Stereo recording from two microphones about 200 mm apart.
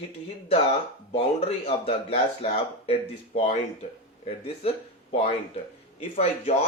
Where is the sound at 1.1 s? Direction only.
30° left (ahead or behind).